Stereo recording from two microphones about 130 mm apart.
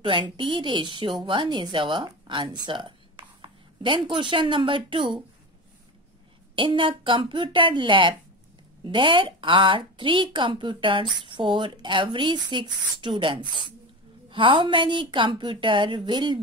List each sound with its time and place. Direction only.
0.0 s a woman's voice: 40° right (ahead or behind)
6.5 s a woman's voice: 40° right (ahead or behind)